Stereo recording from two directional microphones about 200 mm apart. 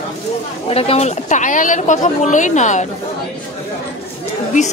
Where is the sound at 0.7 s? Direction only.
30° left (ahead or behind).